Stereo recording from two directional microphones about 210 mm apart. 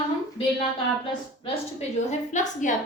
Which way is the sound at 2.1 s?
35° left (ahead or behind).